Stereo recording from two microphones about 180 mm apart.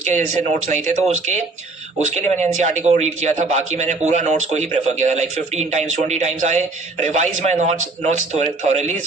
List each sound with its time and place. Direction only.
0.0 s speech: 40° right (ahead or behind)